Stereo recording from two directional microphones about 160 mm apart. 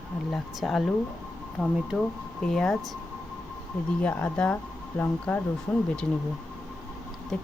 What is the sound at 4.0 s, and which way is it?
Speech, 10° left (ahead or behind).